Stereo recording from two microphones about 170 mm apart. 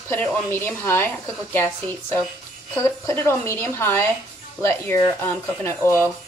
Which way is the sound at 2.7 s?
15° left (ahead or behind).